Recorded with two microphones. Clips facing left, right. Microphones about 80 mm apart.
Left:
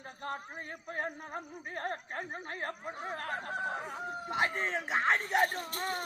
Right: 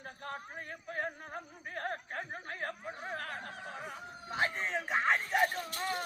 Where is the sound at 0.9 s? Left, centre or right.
Left.